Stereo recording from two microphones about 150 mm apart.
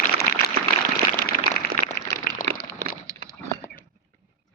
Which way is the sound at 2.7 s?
25° right (ahead or behind).